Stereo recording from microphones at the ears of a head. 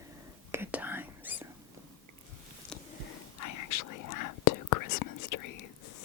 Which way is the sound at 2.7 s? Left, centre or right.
Left.